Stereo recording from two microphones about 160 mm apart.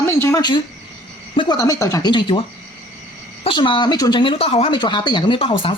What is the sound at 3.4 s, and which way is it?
Speech, 30° left (ahead or behind).